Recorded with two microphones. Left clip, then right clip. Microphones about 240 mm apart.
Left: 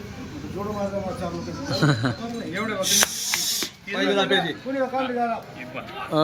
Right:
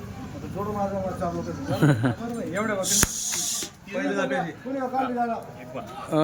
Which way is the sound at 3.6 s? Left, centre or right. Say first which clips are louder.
Left 5 dB; left.